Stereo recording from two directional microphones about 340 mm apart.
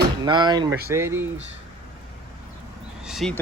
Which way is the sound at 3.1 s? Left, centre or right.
Centre.